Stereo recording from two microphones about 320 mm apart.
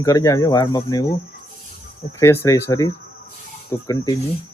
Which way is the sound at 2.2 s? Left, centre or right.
Centre.